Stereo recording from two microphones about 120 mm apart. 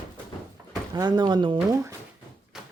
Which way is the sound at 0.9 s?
35° right (ahead or behind).